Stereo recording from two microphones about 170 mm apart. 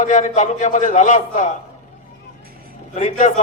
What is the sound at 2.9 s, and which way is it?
Speech, 45° left (ahead or behind).